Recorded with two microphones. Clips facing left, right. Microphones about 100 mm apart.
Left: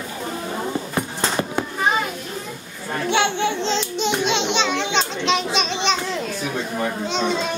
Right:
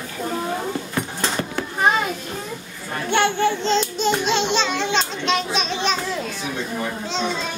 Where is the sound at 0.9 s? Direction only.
20° left (ahead or behind).